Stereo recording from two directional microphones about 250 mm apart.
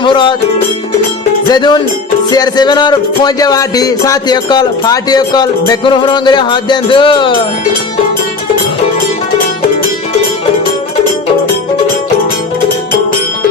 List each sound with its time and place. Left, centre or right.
0.0 s music: centre
1.5 s music: centre